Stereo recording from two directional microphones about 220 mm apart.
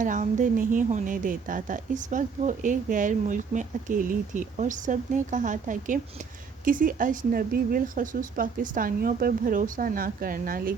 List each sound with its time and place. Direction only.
0.0 s a woman's voice: 35° right (ahead or behind)